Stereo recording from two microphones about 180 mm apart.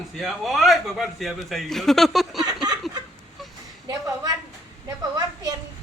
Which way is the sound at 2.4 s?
20° right (ahead or behind).